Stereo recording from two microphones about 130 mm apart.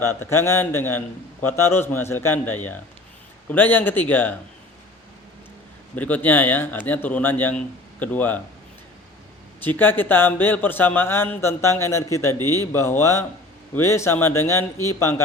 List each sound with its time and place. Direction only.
0.0 s speech: 20° left (ahead or behind)
6.0 s speech: 10° left (ahead or behind)
9.6 s speech: 15° left (ahead or behind)